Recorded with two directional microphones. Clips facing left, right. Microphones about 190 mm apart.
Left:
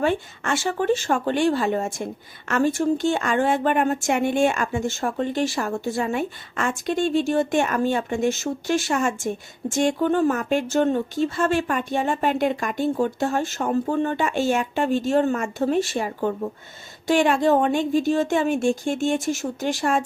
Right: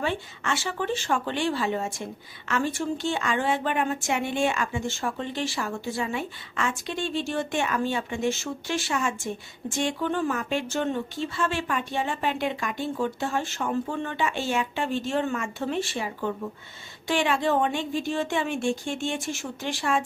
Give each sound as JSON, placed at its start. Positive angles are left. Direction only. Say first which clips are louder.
{"t": 0.0, "sound": "speech", "louder": "left 6 dB", "side_deg": 50}